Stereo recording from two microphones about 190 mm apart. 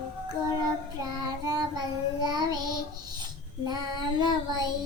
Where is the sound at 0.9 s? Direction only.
20° right (ahead or behind).